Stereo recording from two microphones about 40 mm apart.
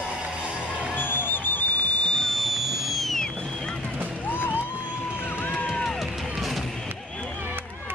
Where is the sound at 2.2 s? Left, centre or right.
Centre.